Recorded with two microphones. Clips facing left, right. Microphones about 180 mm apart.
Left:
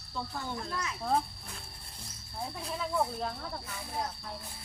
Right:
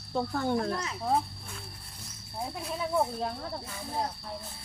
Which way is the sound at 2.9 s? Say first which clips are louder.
Right 3 dB; 20° right (ahead or behind).